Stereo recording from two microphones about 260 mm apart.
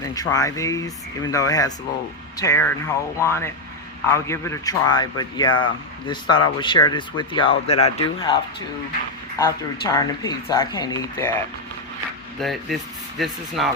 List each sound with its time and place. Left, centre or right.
0.0 s a man's voice: centre
9.4 s a man's voice: centre
12.4 s speech: centre